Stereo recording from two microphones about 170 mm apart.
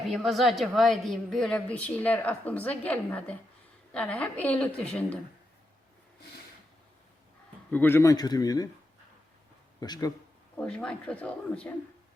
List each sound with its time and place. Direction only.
0.1 s a woman's voice: centre (ahead or behind)
7.7 s speech: 10° left (ahead or behind)
9.8 s speech: 25° left (ahead or behind)
10.6 s a woman's voice: 5° left (ahead or behind)